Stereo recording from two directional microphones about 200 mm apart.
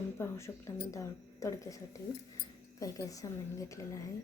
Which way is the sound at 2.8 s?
15° left (ahead or behind).